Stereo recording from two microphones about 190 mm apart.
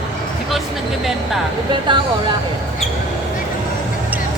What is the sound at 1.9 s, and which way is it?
Vehicle, 25° right (ahead or behind).